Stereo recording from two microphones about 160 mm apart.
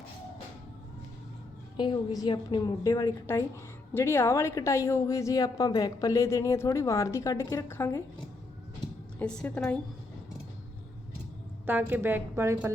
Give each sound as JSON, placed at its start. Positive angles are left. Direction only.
{"t": 1.7, "sound": "a woman's voice", "side_deg": 30}
{"t": 9.1, "sound": "a woman's voice", "side_deg": 5}
{"t": 11.6, "sound": "a woman's voice", "side_deg": -10}